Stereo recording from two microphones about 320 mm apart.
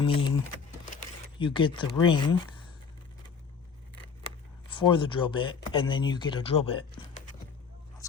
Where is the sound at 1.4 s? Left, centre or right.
Centre.